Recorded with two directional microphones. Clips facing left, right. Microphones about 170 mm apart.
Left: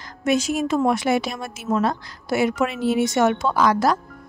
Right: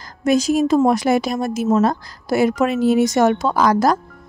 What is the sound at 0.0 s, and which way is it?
A woman's voice, 40° right (ahead or behind).